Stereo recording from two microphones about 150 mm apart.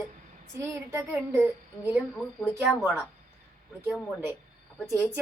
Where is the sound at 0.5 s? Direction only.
15° right (ahead or behind).